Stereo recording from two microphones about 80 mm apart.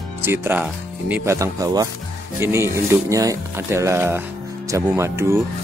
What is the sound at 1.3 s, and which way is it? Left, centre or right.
Speech, right.